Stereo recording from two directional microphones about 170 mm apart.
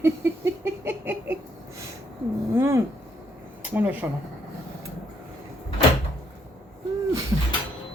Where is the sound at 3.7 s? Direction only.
10° right (ahead or behind).